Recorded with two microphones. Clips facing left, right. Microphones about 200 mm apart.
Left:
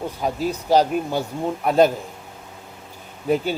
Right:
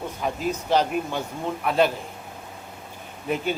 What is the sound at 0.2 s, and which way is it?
Speech, 35° left (ahead or behind).